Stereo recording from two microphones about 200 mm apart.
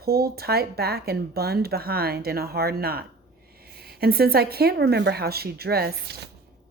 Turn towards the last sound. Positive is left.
turn(degrees=-55)  # may be behind; listen again after turning